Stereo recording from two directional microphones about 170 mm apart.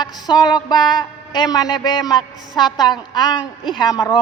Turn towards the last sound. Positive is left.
turn(degrees=25)  # may be behind; listen again after turning